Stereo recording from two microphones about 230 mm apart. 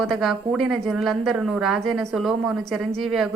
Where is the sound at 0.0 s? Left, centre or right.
Centre.